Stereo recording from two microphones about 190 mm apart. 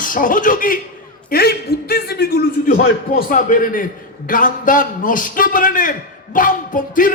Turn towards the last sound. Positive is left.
turn(degrees=45)  # may be behind; listen again after turning